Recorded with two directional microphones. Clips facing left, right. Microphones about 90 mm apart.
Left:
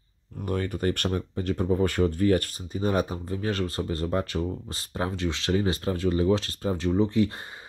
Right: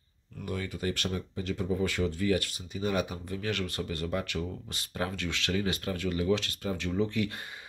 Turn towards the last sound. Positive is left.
turn(degrees=30)  # may be behind; listen again after turning